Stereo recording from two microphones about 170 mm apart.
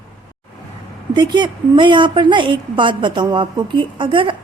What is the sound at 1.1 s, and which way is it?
A woman's voice, 25° right (ahead or behind).